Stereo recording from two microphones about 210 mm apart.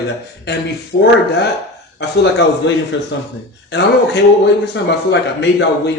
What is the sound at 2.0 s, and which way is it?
Speech, 55° left (ahead or behind).